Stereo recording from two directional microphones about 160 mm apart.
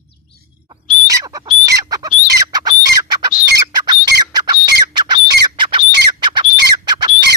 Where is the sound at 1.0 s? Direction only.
20° right (ahead or behind).